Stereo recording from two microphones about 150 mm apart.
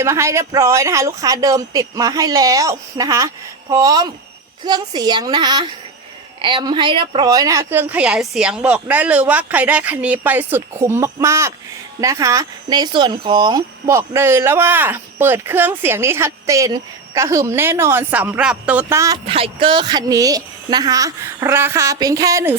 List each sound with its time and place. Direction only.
0.0 s speech: 20° right (ahead or behind)
19.2 s speech: 40° right (ahead or behind); by 22.5 s 20° right (ahead or behind)